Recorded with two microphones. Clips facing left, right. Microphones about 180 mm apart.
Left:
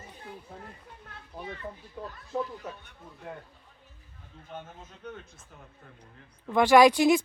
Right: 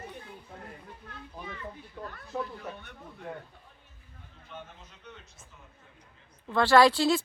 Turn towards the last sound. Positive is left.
turn(degrees=15)  # may be behind; listen again after turning